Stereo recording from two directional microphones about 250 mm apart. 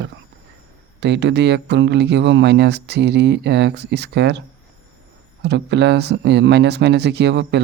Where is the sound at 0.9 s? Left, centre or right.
Right.